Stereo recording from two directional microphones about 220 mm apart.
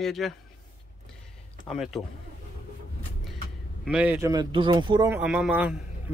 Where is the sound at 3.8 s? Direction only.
5° right (ahead or behind).